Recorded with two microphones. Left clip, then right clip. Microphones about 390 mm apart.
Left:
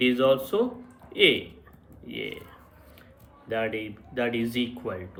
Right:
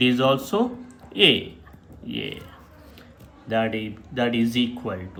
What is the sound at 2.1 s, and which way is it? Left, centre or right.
Speech, centre.